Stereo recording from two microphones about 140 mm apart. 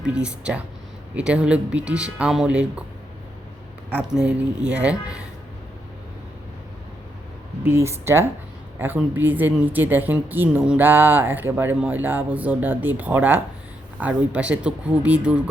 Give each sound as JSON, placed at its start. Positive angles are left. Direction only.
{"t": 0.0, "sound": "speech", "side_deg": -5}
{"t": 3.9, "sound": "speech", "side_deg": -5}
{"t": 7.6, "sound": "speech", "side_deg": -20}